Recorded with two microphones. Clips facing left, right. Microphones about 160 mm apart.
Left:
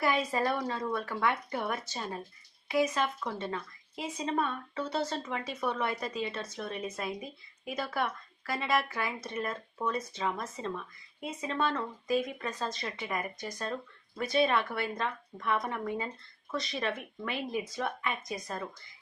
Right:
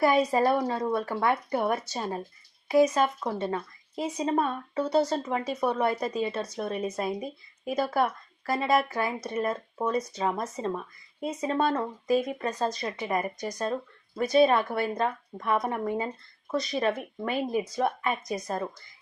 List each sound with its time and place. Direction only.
0.0 s a woman's voice: 40° right (ahead or behind)